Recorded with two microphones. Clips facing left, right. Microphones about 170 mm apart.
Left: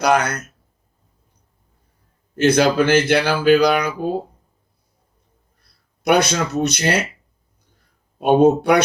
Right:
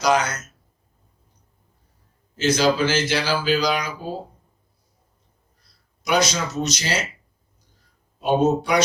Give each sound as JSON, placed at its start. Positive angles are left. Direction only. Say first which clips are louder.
{"t": 0.0, "sound": "speech", "louder": "left 3 dB", "side_deg": 60}
{"t": 2.3, "sound": "speech", "louder": "left 4 dB", "side_deg": 60}
{"t": 5.5, "sound": "speech", "louder": "even", "side_deg": 60}
{"t": 8.2, "sound": "speech", "louder": "left 6 dB", "side_deg": 60}